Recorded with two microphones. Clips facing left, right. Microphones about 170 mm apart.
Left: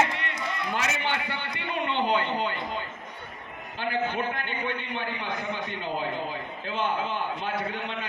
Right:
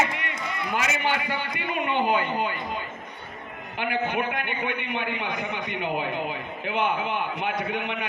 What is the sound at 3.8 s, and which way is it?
A man's voice, 15° right (ahead or behind).